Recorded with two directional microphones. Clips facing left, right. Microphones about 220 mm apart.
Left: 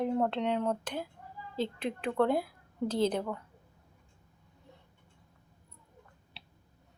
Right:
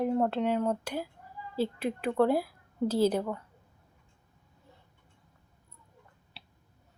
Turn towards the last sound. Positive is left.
turn(degrees=0)  # may be behind; listen again after turning